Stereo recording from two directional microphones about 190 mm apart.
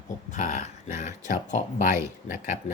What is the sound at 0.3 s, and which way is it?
Speech, 40° left (ahead or behind).